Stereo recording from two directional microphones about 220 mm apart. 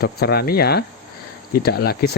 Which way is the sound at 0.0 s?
45° left (ahead or behind).